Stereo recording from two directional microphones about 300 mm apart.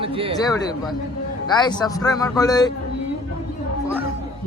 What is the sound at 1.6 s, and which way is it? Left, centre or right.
A man's voice, centre.